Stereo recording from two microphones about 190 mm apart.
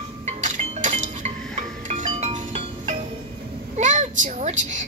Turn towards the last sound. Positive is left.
turn(degrees=-40)  # may be behind; listen again after turning